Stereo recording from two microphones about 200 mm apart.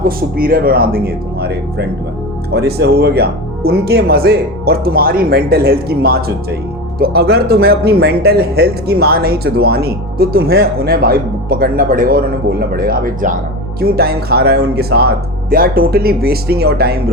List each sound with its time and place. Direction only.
0.0 s speech: 45° right (ahead or behind)